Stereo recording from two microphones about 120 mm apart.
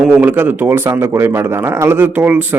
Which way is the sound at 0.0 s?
10° right (ahead or behind).